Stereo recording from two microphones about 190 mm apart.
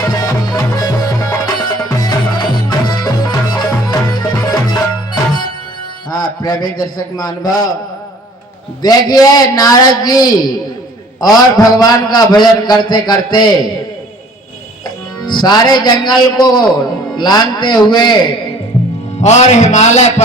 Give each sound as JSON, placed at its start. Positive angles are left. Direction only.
{"t": 0.0, "sound": "music", "side_deg": 20}
{"t": 6.1, "sound": "a man's voice", "side_deg": 20}
{"t": 8.8, "sound": "a man's voice", "side_deg": 20}
{"t": 15.3, "sound": "a man's voice", "side_deg": 25}
{"t": 19.2, "sound": "music", "side_deg": 35}